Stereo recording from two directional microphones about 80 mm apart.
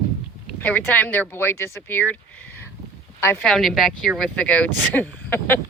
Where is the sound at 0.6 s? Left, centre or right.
Centre.